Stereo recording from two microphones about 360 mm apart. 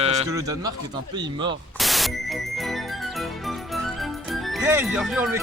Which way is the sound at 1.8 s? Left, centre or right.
Centre.